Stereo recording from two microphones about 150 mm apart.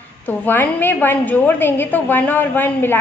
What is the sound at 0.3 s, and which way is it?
A woman's voice, 10° left (ahead or behind).